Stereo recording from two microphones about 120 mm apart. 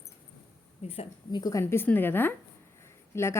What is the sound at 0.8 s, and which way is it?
Speech, 60° left (ahead or behind).